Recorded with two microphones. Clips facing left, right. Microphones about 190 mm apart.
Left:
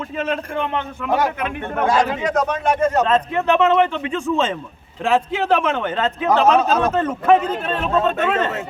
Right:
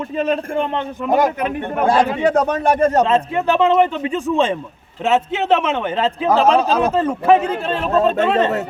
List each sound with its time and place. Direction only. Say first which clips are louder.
1.0 s a man's voice: right 4 dB; 35° right (ahead or behind)
6.5 s a man's voice: right 1 dB; 10° right (ahead or behind)
7.9 s a man's voice: right 4 dB; 30° right (ahead or behind)